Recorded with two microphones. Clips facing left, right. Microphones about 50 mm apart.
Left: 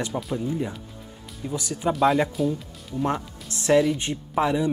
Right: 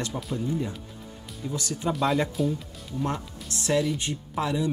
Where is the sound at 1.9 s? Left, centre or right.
Centre.